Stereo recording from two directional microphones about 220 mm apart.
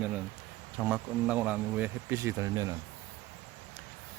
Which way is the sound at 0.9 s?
5° right (ahead or behind).